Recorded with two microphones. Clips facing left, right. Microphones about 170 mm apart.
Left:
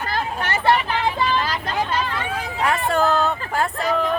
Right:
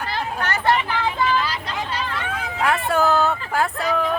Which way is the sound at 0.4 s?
25° left (ahead or behind).